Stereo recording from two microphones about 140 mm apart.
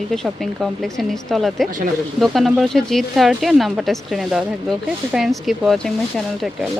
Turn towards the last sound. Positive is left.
turn(degrees=0)  # may be behind; listen again after turning